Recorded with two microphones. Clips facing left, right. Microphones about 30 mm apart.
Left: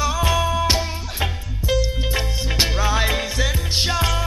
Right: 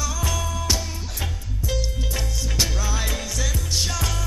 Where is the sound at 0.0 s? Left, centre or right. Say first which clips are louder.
Left 7 dB; left.